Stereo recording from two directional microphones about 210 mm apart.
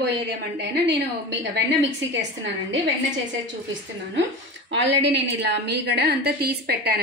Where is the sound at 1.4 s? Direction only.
55° right (ahead or behind).